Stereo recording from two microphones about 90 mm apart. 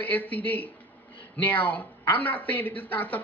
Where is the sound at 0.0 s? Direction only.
20° left (ahead or behind).